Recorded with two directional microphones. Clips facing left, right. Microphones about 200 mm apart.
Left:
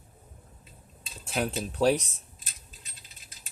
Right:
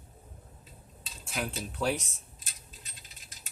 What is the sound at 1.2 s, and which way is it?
Speech, 35° left (ahead or behind).